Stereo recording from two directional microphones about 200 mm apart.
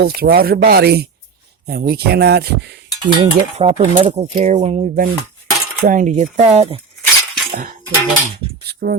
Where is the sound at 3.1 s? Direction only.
25° right (ahead or behind).